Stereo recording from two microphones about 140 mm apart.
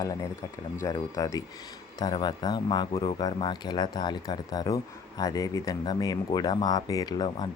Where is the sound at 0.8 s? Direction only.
20° left (ahead or behind).